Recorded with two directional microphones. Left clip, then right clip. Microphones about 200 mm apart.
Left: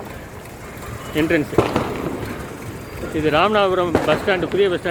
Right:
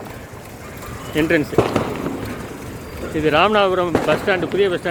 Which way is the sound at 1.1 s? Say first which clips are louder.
Right 1 dB; centre (ahead or behind).